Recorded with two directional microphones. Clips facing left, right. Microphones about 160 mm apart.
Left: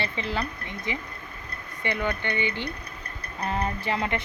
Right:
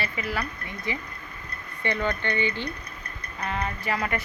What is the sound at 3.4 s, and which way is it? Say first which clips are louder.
Speech: left 2 dB; 35° left (ahead or behind).